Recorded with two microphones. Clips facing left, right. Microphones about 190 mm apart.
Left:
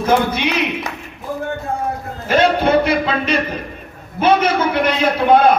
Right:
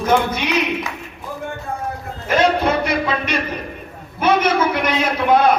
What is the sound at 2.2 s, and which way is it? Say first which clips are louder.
A man's voice: left 2 dB; 30° left (ahead or behind).